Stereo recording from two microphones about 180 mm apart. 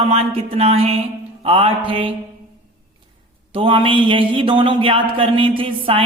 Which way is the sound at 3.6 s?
30° right (ahead or behind).